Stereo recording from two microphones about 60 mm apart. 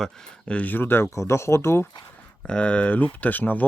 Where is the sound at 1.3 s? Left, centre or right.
Left.